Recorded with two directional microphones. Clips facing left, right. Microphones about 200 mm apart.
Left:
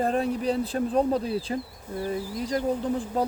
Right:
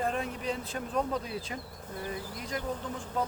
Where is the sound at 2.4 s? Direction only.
35° left (ahead or behind).